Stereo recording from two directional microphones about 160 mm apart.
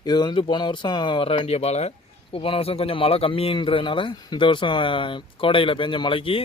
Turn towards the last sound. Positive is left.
turn(degrees=35)  # may be behind; listen again after turning